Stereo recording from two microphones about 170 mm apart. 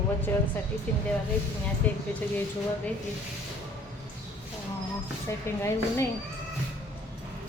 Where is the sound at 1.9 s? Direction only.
10° left (ahead or behind).